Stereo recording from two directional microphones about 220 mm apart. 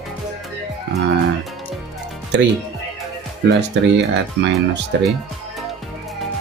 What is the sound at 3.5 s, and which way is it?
Speech, 50° right (ahead or behind).